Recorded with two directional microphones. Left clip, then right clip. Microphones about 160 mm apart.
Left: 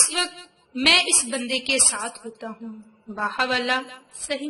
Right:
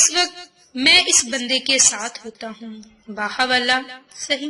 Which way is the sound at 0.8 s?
15° right (ahead or behind).